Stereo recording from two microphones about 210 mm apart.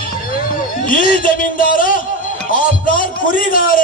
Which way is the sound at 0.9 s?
40° left (ahead or behind).